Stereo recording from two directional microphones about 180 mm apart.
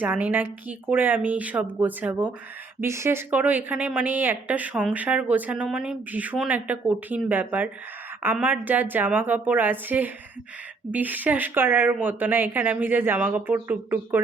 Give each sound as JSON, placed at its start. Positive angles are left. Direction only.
{"t": 0.0, "sound": "speech", "side_deg": -10}